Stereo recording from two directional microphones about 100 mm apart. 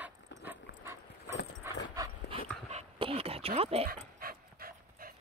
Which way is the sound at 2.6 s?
85° right.